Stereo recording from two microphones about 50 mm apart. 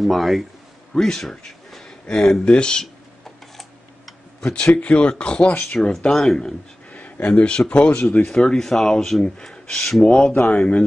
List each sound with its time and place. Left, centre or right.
0.0 s speech: centre
4.4 s speech: centre
5.9 s speech: centre
6.9 s speech: left